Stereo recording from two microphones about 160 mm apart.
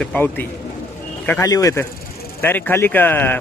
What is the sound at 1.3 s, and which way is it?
Speech, 20° left (ahead or behind).